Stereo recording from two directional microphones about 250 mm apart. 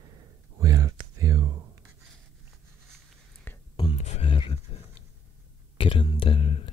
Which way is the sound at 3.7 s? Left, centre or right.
Left.